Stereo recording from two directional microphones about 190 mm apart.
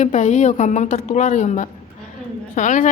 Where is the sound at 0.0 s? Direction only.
40° left (ahead or behind).